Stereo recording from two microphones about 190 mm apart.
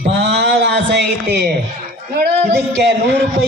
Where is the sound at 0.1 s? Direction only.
65° right (ahead or behind).